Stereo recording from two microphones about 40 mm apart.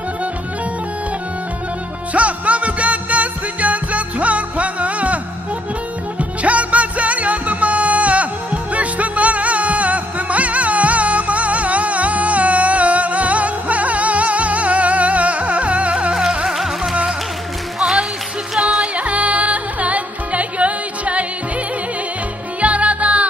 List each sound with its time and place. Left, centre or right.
2.1 s music: right
16.1 s music: centre
17.7 s music: centre
18.6 s music: right
22.6 s music: right